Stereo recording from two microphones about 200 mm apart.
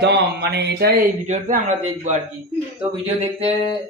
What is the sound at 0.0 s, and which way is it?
Speech, 55° right (ahead or behind).